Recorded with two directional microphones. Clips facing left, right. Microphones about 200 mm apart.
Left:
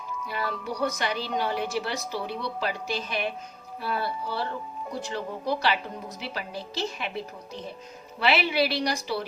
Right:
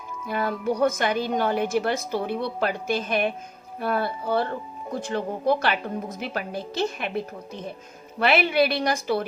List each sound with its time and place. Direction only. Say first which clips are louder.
0.3 s a woman's voice: right 8 dB; 50° right (ahead or behind)